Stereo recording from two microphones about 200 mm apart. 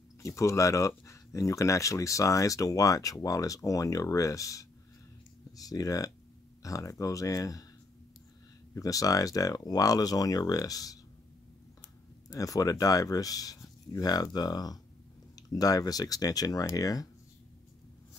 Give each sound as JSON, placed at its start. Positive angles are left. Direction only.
{"t": 0.2, "sound": "speech", "side_deg": 15}
{"t": 5.7, "sound": "speech", "side_deg": 20}
{"t": 8.7, "sound": "speech", "side_deg": 15}
{"t": 12.4, "sound": "speech", "side_deg": 15}